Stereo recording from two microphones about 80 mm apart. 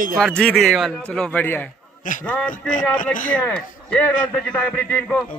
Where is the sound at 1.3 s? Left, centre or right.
Left.